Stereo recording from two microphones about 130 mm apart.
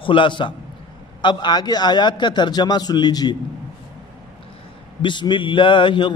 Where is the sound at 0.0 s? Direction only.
40° left (ahead or behind).